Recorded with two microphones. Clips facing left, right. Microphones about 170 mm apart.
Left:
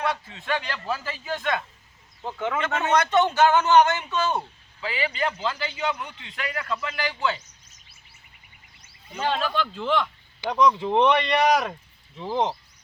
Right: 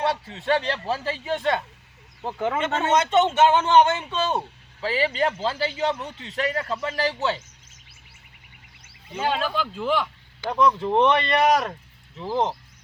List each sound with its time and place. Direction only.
0.0 s a man's voice: 35° right (ahead or behind)
6.1 s speech: 40° right (ahead or behind)
9.1 s speech: 5° right (ahead or behind)